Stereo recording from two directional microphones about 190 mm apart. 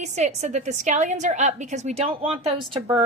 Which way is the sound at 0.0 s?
35° right (ahead or behind).